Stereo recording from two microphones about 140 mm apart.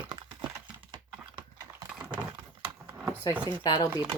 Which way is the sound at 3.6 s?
35° left (ahead or behind).